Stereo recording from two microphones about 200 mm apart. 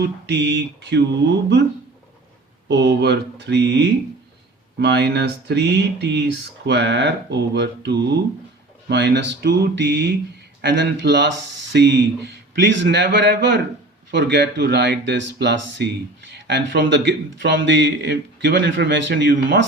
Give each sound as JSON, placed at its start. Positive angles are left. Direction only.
{"t": 0.0, "sound": "a man's voice", "side_deg": -60}
{"t": 2.6, "sound": "a man's voice", "side_deg": -60}